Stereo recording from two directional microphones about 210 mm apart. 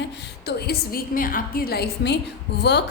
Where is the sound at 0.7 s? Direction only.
45° left (ahead or behind).